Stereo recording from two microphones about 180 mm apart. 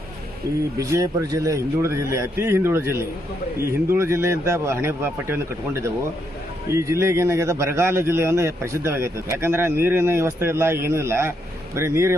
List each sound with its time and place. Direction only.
0.8 s a man's voice: 20° right (ahead or behind)
6.7 s a man's voice: 15° right (ahead or behind)